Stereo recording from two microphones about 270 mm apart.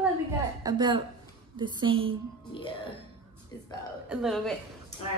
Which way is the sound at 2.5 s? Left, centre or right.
Centre.